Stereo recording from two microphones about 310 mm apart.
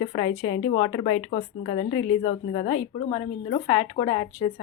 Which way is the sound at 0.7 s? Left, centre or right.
Centre.